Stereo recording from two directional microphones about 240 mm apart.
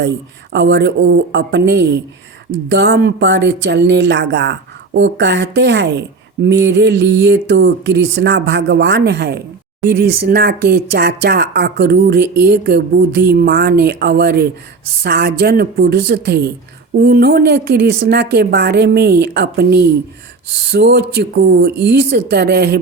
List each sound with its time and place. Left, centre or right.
0.5 s a woman's voice: right